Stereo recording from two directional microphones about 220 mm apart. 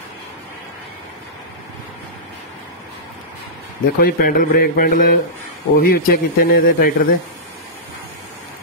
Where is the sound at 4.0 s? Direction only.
45° left (ahead or behind).